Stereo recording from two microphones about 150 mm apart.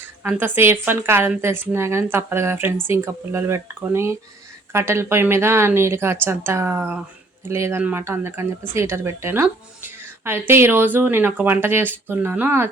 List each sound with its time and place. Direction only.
0.2 s speech: 15° right (ahead or behind)